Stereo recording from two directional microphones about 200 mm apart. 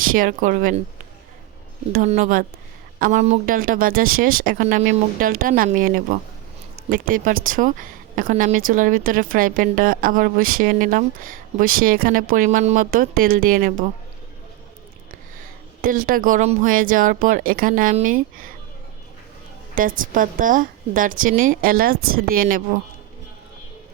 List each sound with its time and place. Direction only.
0.0 s speech: 45° right (ahead or behind)
1.9 s speech: 40° right (ahead or behind)
15.8 s speech: 45° right (ahead or behind)
19.7 s speech: 45° right (ahead or behind)